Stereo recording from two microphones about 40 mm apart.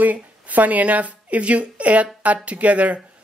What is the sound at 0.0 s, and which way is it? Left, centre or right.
A woman's voice, right.